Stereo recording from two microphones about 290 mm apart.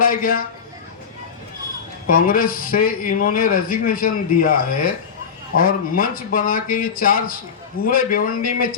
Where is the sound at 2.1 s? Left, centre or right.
Left.